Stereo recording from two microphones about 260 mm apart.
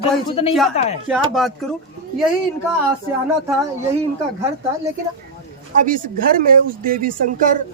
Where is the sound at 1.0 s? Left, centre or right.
Centre.